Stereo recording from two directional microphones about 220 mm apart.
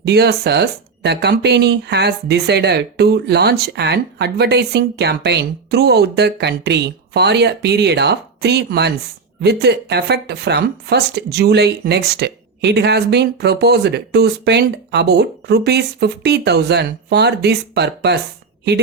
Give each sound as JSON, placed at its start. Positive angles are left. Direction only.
{"t": 0.0, "sound": "speech", "side_deg": -50}